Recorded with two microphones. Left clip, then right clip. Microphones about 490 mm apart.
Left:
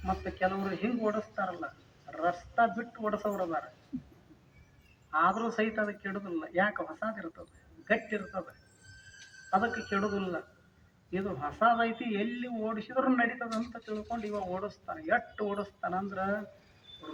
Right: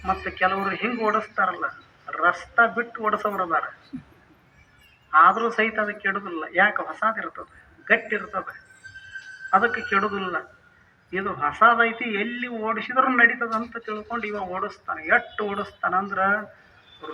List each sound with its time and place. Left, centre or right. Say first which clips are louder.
0.0 s a man's voice: right 9 dB; left
5.1 s a man's voice: right 12 dB; left
9.5 s a man's voice: right 10 dB; left